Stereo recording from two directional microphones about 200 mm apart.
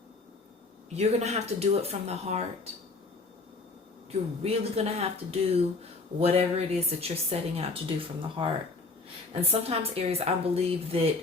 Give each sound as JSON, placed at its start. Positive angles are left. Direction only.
{"t": 0.9, "sound": "speech", "side_deg": -30}
{"t": 4.1, "sound": "a woman's voice", "side_deg": -30}